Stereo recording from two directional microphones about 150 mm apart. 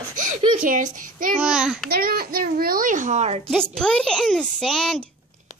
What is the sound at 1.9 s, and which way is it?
A child's voice, 90° right.